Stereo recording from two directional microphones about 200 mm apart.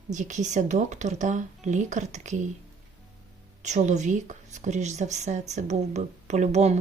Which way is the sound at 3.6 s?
35° right (ahead or behind).